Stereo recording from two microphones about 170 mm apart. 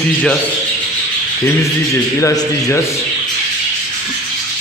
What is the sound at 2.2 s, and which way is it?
Speech, 20° left (ahead or behind).